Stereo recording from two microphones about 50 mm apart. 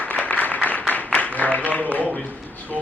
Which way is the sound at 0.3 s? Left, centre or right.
Left.